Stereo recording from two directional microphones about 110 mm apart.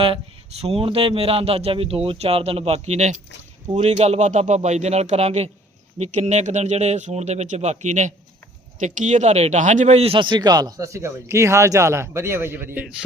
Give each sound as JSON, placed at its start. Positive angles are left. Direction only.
{"t": 0.0, "sound": "speech", "side_deg": -60}
{"t": 3.8, "sound": "speech", "side_deg": -75}
{"t": 10.2, "sound": "a man's voice", "side_deg": -45}